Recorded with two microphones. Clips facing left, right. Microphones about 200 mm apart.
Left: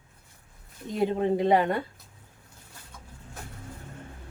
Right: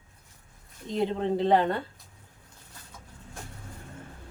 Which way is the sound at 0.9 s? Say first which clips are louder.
Left 2 dB; 10° left (ahead or behind).